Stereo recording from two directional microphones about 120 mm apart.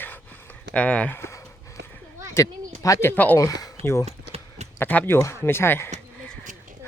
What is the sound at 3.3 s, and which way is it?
Speech, 30° left (ahead or behind).